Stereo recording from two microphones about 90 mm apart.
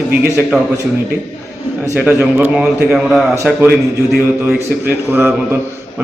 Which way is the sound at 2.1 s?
25° right (ahead or behind).